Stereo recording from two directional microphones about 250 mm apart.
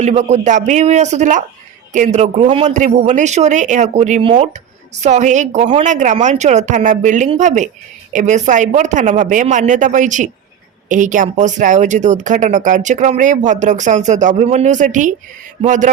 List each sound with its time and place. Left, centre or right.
0.0 s speech: right